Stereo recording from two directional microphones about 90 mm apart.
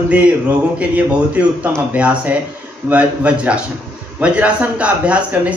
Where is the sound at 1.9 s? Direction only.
15° right (ahead or behind).